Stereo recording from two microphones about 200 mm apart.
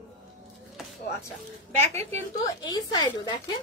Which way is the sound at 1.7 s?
10° left (ahead or behind).